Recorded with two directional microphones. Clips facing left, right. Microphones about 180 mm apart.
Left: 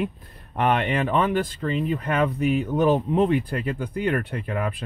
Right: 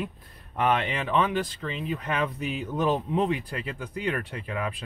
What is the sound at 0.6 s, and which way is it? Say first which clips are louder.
Speech: left 4 dB; 55° left (ahead or behind).